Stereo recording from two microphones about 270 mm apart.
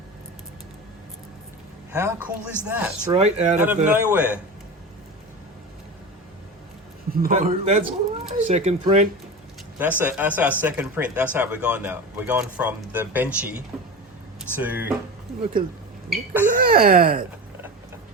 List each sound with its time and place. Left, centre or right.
1.9 s a man's voice: centre
3.0 s speech: right
3.8 s a man's voice: centre
7.1 s speech: right
9.7 s a man's voice: centre
16.0 s speech: centre
16.5 s speech: right